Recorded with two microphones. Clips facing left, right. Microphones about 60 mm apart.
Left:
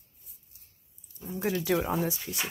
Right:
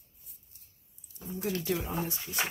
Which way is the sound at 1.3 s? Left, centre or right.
Left.